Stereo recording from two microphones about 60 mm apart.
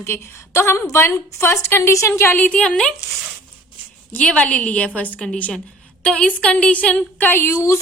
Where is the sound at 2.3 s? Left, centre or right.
Left.